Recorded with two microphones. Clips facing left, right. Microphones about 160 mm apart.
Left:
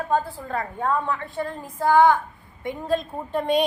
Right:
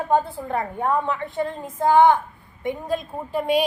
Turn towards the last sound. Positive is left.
turn(degrees=-5)  # may be behind; listen again after turning